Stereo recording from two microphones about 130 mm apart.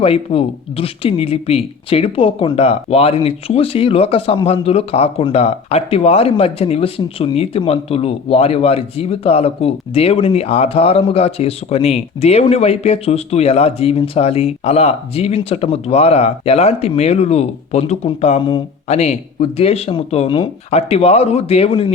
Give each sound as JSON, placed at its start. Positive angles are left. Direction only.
{"t": 0.0, "sound": "speech", "side_deg": 50}
{"t": 20.7, "sound": "speech", "side_deg": 55}